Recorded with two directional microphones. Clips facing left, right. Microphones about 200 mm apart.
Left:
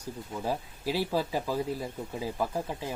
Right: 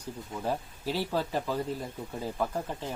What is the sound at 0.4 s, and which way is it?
Speech, 10° left (ahead or behind).